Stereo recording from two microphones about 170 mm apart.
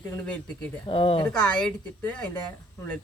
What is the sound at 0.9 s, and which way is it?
Speech, 30° left (ahead or behind).